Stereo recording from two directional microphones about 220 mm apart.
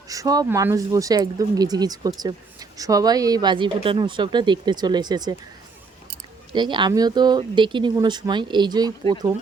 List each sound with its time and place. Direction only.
0.1 s speech: 15° right (ahead or behind)
6.5 s speech: 20° right (ahead or behind)